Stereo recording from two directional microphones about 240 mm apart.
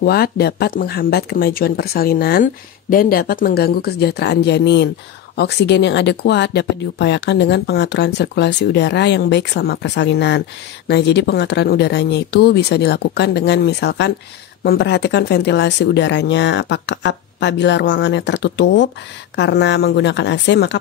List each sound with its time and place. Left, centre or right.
0.0 s speech: left